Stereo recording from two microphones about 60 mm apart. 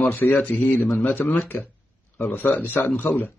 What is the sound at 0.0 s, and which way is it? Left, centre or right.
A man's voice, left.